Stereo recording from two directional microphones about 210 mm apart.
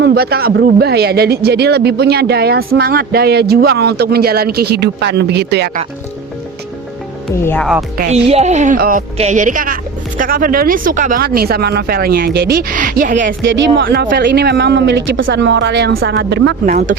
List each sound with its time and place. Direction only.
0.0 s speech: 50° right (ahead or behind)
7.4 s speech: 10° left (ahead or behind)
8.1 s a woman's voice: 30° right (ahead or behind)
13.7 s a woman's voice: 50° right (ahead or behind)
16.1 s speech: 50° right (ahead or behind)